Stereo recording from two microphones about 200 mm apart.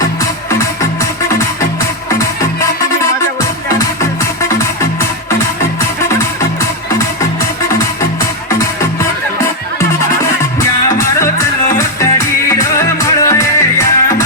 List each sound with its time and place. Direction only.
2.0 s music: 15° left (ahead or behind)
4.2 s music: 15° left (ahead or behind)
6.1 s music: 15° left (ahead or behind)
8.4 s music: 15° left (ahead or behind)
10.2 s music: 15° left (ahead or behind)